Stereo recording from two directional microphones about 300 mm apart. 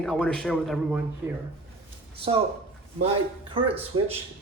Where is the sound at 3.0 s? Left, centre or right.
Centre.